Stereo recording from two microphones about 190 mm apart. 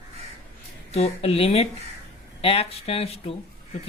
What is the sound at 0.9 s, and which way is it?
Speech, 35° left (ahead or behind).